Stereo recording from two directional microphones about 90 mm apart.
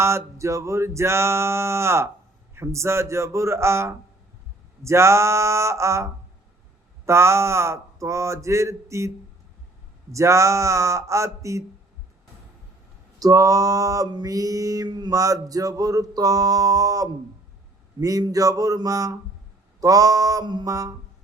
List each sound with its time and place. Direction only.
0.0 s music: 30° right (ahead or behind)
13.1 s music: 40° right (ahead or behind)
14.8 s music: 50° right (ahead or behind)
20.7 s music: 40° right (ahead or behind)